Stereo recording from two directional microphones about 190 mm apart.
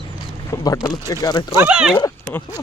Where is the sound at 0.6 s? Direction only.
20° left (ahead or behind).